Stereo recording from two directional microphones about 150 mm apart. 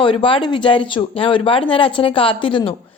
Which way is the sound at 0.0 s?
35° left (ahead or behind).